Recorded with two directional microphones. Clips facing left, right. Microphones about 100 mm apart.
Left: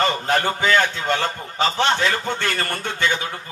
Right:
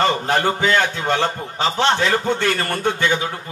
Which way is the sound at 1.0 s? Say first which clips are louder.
Right 3 dB; 25° right (ahead or behind).